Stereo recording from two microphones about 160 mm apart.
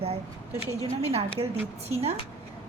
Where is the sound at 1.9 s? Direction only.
40° right (ahead or behind).